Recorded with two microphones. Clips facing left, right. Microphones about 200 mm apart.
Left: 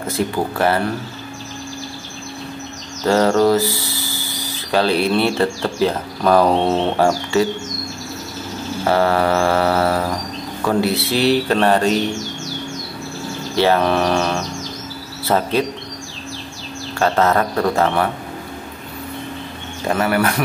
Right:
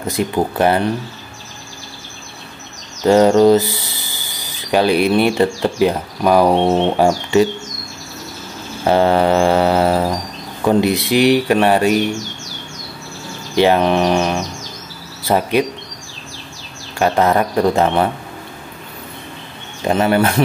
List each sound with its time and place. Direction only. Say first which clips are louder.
0.0 s speech: right 2 dB; 15° right (ahead or behind)
3.1 s speech: right 4 dB; 15° right (ahead or behind)
8.8 s mantra: right 3 dB; 20° right (ahead or behind)
10.6 s speech: right 4 dB; 20° right (ahead or behind)
13.6 s speech: right 3 dB; 15° right (ahead or behind)
17.0 s speech: right 2 dB; 15° right (ahead or behind)
19.9 s speech: right 3 dB; 25° right (ahead or behind)